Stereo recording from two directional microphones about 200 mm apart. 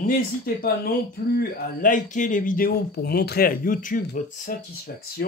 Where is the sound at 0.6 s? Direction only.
50° left (ahead or behind).